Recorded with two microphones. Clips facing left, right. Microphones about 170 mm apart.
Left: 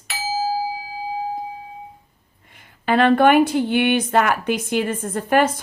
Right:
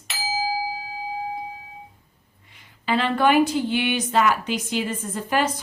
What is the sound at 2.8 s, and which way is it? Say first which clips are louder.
A woman's voice: left 6 dB; 55° left (ahead or behind).